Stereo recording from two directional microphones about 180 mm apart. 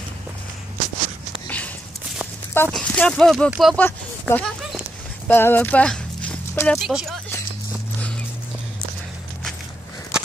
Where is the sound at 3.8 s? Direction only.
10° left (ahead or behind).